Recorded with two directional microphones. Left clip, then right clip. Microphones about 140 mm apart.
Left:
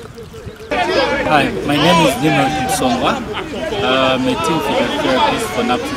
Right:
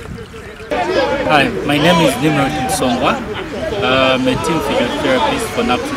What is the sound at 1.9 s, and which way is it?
Speech, 35° left (ahead or behind).